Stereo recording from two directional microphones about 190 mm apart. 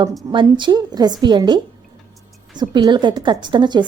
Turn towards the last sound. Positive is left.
turn(degrees=-25)  # may be behind; listen again after turning